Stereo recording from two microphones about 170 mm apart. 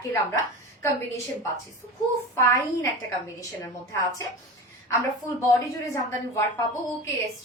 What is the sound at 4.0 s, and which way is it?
Speech, 20° left (ahead or behind).